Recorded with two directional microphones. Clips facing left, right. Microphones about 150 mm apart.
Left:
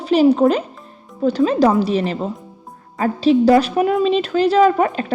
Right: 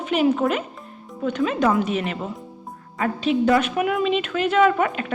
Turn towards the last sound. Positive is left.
turn(degrees=35)  # may be behind; listen again after turning